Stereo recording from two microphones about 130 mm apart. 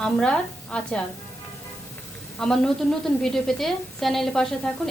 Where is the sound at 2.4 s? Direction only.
5° left (ahead or behind).